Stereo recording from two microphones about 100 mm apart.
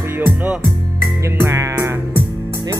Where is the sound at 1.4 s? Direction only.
30° right (ahead or behind).